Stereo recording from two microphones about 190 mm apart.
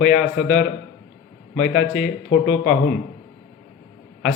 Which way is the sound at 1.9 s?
40° left (ahead or behind).